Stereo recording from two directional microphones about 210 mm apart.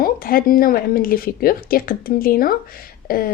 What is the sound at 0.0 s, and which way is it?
Speech, 45° left (ahead or behind).